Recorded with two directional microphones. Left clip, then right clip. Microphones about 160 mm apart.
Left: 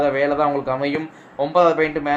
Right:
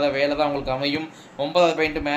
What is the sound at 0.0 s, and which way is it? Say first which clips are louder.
Speech: left 3 dB; 35° left (ahead or behind).